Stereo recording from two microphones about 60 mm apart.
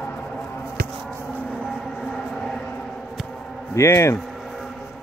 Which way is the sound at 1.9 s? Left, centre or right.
Centre.